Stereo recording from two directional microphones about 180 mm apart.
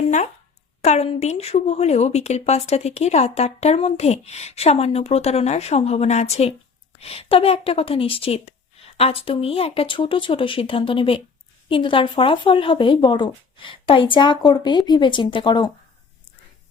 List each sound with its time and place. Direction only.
0.8 s a woman's voice: 35° left (ahead or behind)